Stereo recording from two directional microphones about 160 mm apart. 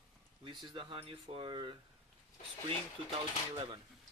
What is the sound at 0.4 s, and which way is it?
Speech, 30° right (ahead or behind).